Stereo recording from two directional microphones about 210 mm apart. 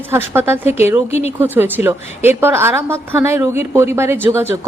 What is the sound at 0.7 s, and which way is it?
Speech, 30° left (ahead or behind).